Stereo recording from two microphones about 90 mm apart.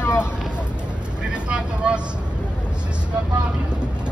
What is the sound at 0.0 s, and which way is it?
Vehicle, 30° left (ahead or behind).